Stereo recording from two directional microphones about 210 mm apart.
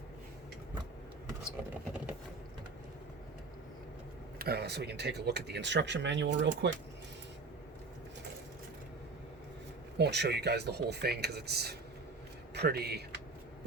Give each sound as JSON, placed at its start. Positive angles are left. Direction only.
{"t": 4.4, "sound": "speech", "side_deg": -50}
{"t": 10.0, "sound": "speech", "side_deg": -55}